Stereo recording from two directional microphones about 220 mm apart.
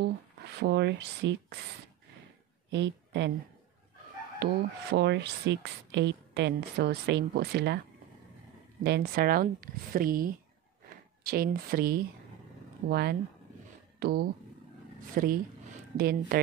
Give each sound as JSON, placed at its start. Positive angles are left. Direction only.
{"t": 0.6, "sound": "speech", "side_deg": -50}
{"t": 2.7, "sound": "a woman's voice", "side_deg": -50}
{"t": 4.4, "sound": "speech", "side_deg": -50}
{"t": 8.8, "sound": "speech", "side_deg": -45}